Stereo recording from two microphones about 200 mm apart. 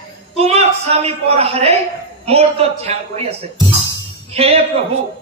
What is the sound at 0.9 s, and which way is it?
A man's voice, 30° right (ahead or behind).